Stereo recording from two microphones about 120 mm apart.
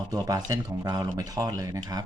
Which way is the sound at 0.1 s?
30° right (ahead or behind).